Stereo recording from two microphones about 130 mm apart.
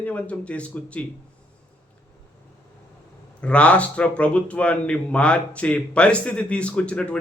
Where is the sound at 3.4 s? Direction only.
10° left (ahead or behind).